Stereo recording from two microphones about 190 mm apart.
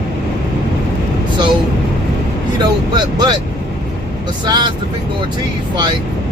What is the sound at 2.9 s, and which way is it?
Speech, 25° right (ahead or behind).